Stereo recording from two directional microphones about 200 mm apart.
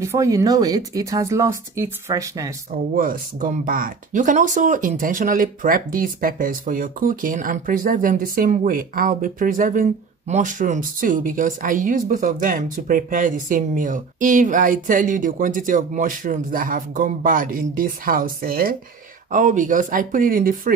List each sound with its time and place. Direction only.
0.0 s speech: 15° right (ahead or behind)
3.0 s speech: 45° right (ahead or behind)